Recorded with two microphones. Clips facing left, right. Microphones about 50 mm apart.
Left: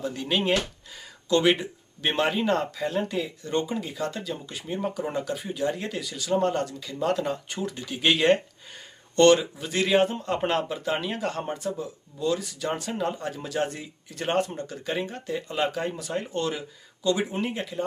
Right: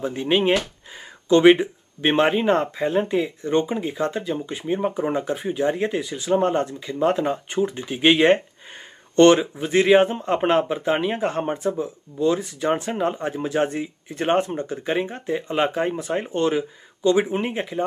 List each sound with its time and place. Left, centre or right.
0.0 s speech: right